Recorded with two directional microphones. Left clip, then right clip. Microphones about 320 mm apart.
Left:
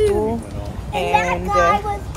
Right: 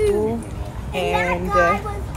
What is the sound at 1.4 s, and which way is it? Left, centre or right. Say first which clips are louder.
Speech: right 1 dB; left.